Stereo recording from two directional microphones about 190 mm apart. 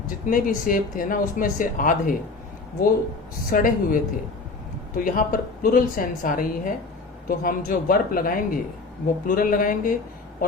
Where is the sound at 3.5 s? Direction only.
45° left (ahead or behind).